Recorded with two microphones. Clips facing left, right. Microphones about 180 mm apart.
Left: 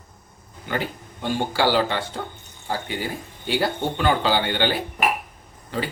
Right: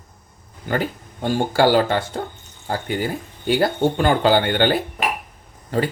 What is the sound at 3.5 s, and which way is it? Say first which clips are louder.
Speech: right 5 dB; 45° right (ahead or behind).